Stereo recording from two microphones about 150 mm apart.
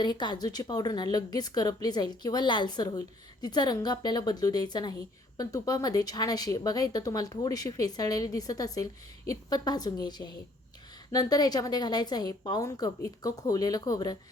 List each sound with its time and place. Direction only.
0.0 s a woman's voice: 30° left (ahead or behind)